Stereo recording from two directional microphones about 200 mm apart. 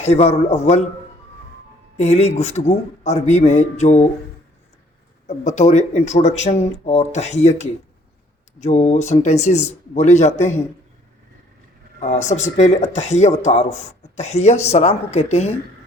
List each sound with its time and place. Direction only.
0.0 s speech: 30° left (ahead or behind)
2.0 s speech: 35° left (ahead or behind)
5.3 s speech: 35° left (ahead or behind)
11.9 s speech: 35° left (ahead or behind)